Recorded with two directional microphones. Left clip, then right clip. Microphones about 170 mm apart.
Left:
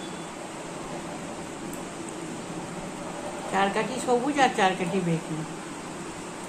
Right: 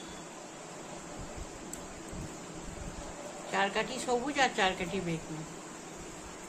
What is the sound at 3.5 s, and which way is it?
A woman's voice, 20° right (ahead or behind).